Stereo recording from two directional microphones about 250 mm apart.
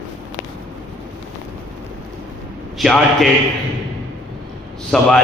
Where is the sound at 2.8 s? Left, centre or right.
Centre.